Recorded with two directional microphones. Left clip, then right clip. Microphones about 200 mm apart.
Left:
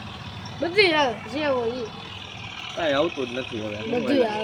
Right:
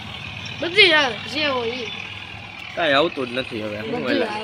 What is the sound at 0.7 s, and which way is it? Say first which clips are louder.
Speech: right 5 dB; 25° left (ahead or behind).